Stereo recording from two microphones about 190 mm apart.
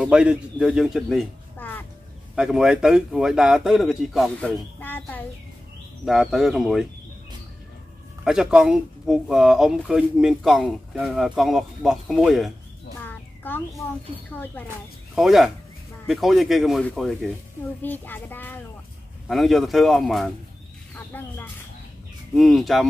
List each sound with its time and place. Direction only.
0.0 s a man's voice: 5° right (ahead or behind); by 1.9 s 10° left (ahead or behind)
2.3 s speech: 5° right (ahead or behind)
6.0 s speech: centre (ahead or behind)
8.2 s speech: 5° right (ahead or behind)
13.0 s a sound: 10° left (ahead or behind)
15.1 s speech: centre (ahead or behind)
19.2 s speech: centre (ahead or behind)
22.3 s speech: centre (ahead or behind)